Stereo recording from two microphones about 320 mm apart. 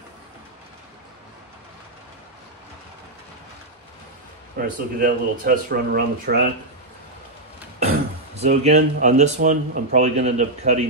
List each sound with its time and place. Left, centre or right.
4.6 s speech: right
8.4 s speech: right